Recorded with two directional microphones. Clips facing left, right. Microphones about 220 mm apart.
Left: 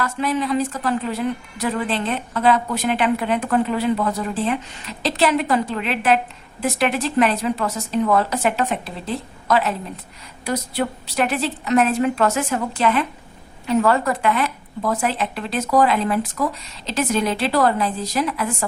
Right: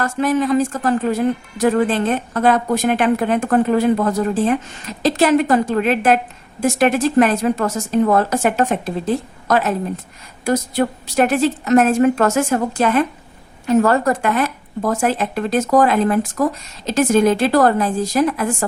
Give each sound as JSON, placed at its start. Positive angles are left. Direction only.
{"t": 0.0, "sound": "a woman's voice", "side_deg": -45}